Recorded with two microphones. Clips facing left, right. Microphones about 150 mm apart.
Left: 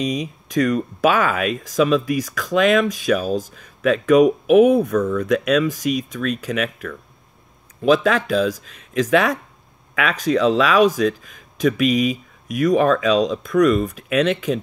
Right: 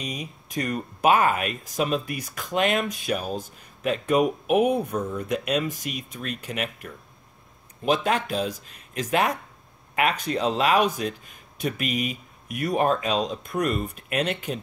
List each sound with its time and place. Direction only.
0.0 s speech: 20° left (ahead or behind)
0.5 s speech: 90° left